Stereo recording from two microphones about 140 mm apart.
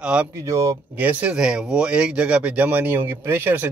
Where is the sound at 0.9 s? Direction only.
10° right (ahead or behind).